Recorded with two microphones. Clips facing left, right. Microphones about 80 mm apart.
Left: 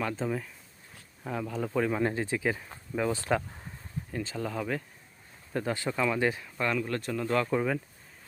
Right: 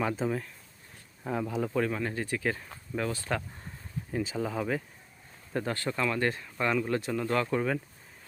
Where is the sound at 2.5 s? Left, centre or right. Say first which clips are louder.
Left 1 dB; centre.